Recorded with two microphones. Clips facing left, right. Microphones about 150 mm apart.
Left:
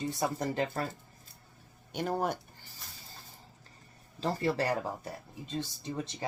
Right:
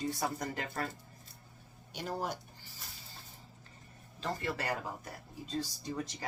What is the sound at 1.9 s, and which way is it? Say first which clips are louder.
Speech: left 6 dB; 55° left (ahead or behind).